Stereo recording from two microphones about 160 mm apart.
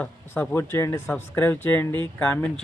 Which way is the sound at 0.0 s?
10° left (ahead or behind).